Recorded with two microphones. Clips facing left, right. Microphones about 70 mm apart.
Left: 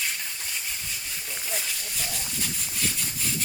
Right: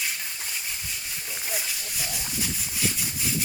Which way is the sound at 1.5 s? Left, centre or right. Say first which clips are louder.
Even; centre.